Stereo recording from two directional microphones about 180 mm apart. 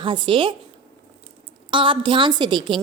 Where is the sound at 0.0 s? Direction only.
25° right (ahead or behind).